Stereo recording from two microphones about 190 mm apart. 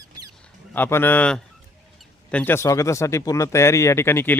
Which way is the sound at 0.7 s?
10° left (ahead or behind).